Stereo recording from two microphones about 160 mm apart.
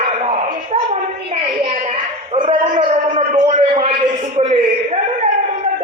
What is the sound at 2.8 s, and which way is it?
A man's voice, 40° right (ahead or behind).